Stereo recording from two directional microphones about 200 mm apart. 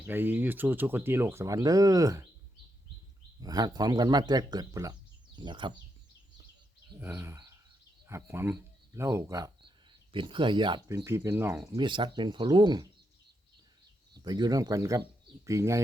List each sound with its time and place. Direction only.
0.0 s speech: 10° right (ahead or behind)
3.4 s speech: 20° right (ahead or behind)
7.0 s speech: 10° right (ahead or behind)
11.8 s speech: 25° right (ahead or behind)
14.1 s speech: 20° right (ahead or behind)